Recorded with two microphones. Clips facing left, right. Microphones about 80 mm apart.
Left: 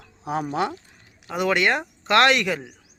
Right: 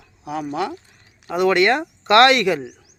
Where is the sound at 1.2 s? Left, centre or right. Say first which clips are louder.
Right 5 dB; centre.